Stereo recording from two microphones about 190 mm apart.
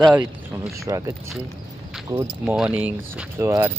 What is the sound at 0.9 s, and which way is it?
Speech, 15° right (ahead or behind).